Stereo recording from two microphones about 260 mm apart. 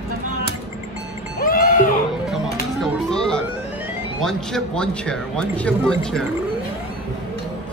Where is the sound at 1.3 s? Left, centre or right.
Left.